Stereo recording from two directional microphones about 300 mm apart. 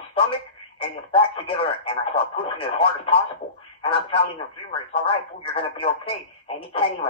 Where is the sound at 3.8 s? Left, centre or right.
Centre.